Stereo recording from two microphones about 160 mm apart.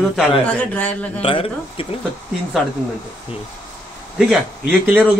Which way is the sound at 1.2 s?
35° left (ahead or behind).